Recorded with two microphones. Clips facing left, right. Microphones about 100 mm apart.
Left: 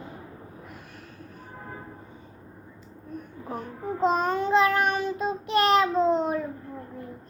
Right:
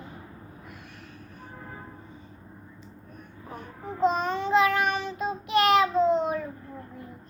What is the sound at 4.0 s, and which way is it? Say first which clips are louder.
Child singing: left 1 dB; 45° left (ahead or behind).